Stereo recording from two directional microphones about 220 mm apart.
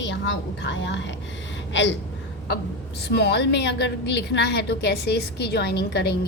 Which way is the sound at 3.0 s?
50° left (ahead or behind).